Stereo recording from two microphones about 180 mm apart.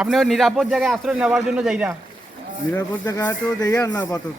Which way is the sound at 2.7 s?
15° left (ahead or behind).